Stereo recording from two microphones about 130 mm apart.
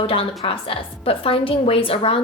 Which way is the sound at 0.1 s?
45° left (ahead or behind).